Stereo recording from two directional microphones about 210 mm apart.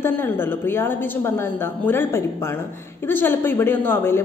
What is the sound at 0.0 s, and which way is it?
A woman's voice, 10° left (ahead or behind).